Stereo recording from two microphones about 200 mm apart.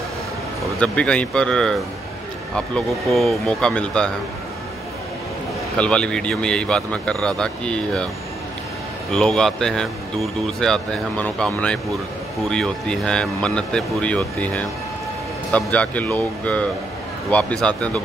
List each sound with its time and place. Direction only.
0.7 s a man's voice: 5° left (ahead or behind)
5.8 s a man's voice: 5° left (ahead or behind)
9.1 s a man's voice: 5° left (ahead or behind)